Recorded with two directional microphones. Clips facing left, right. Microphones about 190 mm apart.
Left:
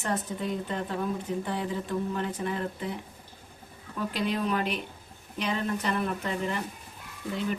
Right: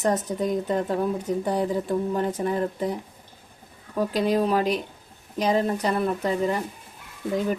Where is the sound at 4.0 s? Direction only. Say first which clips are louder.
Right 7 dB; 40° right (ahead or behind).